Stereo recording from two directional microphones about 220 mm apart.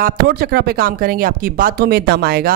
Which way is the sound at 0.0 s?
45° right (ahead or behind).